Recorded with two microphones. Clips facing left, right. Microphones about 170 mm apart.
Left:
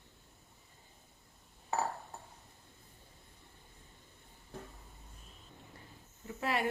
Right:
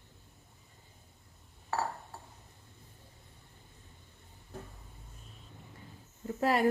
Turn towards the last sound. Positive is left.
turn(degrees=-40)  # may be behind; listen again after turning